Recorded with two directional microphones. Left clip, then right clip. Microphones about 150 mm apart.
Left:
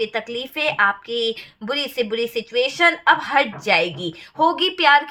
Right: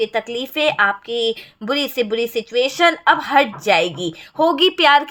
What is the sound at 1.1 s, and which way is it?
Speech, 30° right (ahead or behind).